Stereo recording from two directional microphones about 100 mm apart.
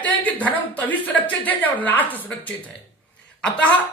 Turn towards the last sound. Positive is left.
turn(degrees=15)  # may be behind; listen again after turning